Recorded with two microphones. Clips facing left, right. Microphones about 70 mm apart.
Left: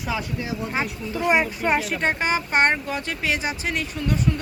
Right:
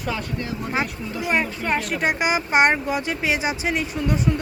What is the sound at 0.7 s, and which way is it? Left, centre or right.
Speech, centre.